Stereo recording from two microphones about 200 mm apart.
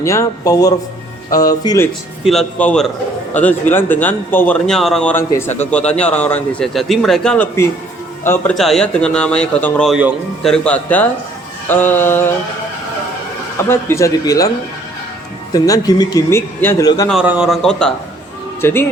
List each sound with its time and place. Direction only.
0.0 s a man's voice: 15° left (ahead or behind)
2.2 s a man's voice: centre (ahead or behind)
13.7 s a man's voice: 10° left (ahead or behind)
15.5 s a man's voice: 15° left (ahead or behind)
17.1 s a man's voice: 5° right (ahead or behind); by 18.9 s 10° left (ahead or behind)